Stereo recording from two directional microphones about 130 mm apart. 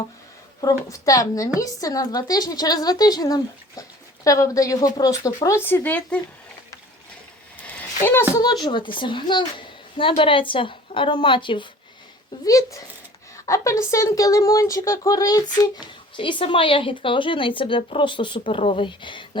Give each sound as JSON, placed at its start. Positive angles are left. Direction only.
{"t": 0.9, "sound": "a woman's voice", "side_deg": 25}
{"t": 7.8, "sound": "a sound", "side_deg": 15}
{"t": 8.6, "sound": "speech", "side_deg": 40}
{"t": 12.5, "sound": "a woman's voice", "side_deg": 25}